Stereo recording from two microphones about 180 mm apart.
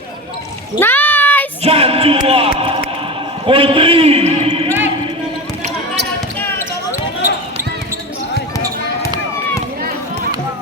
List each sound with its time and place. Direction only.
0.8 s a sound: 10° left (ahead or behind)
1.6 s music: 35° right (ahead or behind)
3.4 s a man's voice: 30° right (ahead or behind)